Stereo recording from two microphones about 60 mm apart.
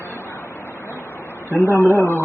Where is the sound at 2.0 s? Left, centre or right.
Left.